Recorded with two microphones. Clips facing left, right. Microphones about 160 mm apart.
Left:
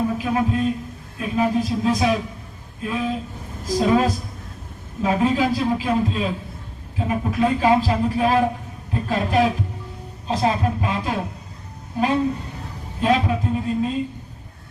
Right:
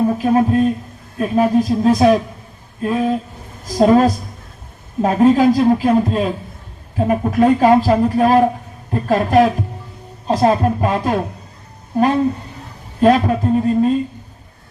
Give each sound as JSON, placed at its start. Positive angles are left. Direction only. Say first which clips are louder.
{"t": 0.2, "sound": "a man's voice", "louder": "right 7 dB", "side_deg": -45}